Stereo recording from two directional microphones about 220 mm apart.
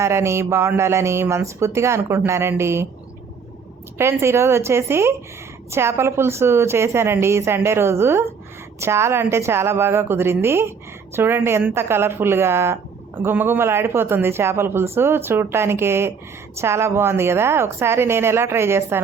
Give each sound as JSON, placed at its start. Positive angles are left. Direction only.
{"t": 0.0, "sound": "a woman's voice", "side_deg": -10}
{"t": 3.9, "sound": "a woman's voice", "side_deg": -10}